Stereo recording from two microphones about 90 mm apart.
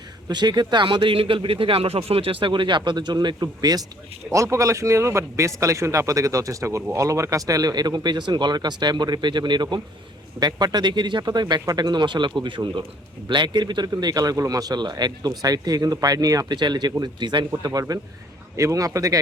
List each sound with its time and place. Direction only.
0.3 s speech: 50° right (ahead or behind)
4.4 s speech: 35° right (ahead or behind)
16.6 s speech: 55° right (ahead or behind)
17.7 s speech: 45° right (ahead or behind)